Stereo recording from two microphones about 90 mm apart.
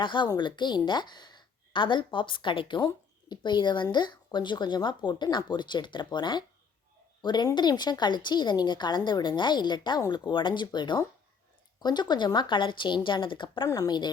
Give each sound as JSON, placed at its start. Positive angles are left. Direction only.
{"t": 0.0, "sound": "a woman's voice", "side_deg": 65}
{"t": 13.7, "sound": "speech", "side_deg": 45}